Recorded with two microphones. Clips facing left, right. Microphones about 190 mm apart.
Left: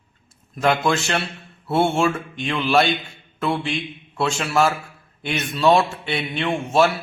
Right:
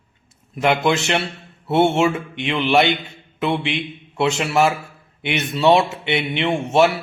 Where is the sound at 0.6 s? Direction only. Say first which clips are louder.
Right 2 dB; 20° right (ahead or behind).